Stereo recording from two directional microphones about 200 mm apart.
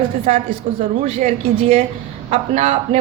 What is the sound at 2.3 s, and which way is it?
Speech, 35° right (ahead or behind).